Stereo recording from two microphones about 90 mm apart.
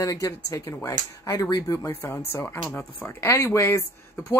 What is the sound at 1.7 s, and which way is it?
Speech, 25° left (ahead or behind).